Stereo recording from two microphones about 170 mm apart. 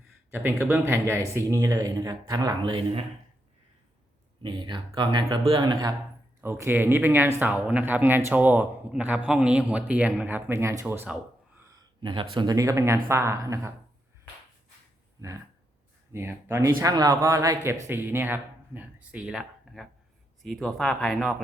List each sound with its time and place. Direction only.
0.3 s speech: 10° right (ahead or behind); by 3.0 s 30° right (ahead or behind)
4.4 s speech: 25° right (ahead or behind)
6.4 s speech: 15° right (ahead or behind)
12.0 s speech: 30° right (ahead or behind)
16.1 s speech: 15° right (ahead or behind); by 21.4 s centre (ahead or behind)